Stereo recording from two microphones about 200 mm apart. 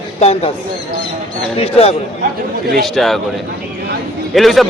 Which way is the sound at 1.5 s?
30° left (ahead or behind).